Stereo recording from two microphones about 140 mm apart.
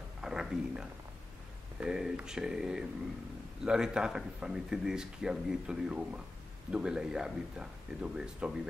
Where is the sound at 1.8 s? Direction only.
5° right (ahead or behind).